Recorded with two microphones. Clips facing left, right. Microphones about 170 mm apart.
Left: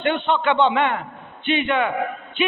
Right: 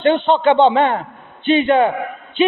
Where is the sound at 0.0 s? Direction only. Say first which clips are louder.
Right 7 dB; 30° right (ahead or behind).